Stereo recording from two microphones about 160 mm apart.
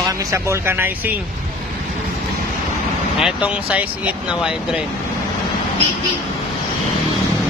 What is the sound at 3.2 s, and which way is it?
Speech, 5° right (ahead or behind).